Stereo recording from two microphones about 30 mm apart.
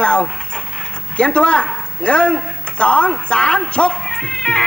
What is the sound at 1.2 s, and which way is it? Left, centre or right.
Speech, left.